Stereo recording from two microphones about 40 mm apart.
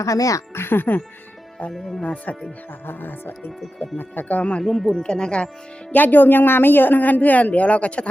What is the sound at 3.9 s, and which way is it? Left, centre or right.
Speech, left.